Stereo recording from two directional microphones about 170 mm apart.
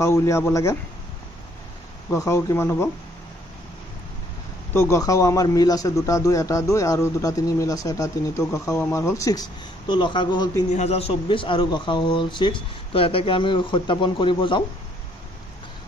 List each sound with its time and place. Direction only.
0.0 s speech: 15° left (ahead or behind)
2.0 s speech: 15° left (ahead or behind)
4.7 s a man's voice: 20° left (ahead or behind)
10.7 s a man's voice: 40° left (ahead or behind)